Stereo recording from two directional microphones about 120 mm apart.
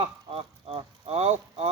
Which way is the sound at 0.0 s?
55° right (ahead or behind).